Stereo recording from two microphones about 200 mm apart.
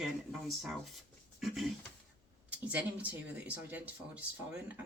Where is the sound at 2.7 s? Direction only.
5° right (ahead or behind).